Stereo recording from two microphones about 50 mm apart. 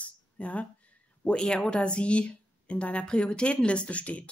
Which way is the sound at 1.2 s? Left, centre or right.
Centre.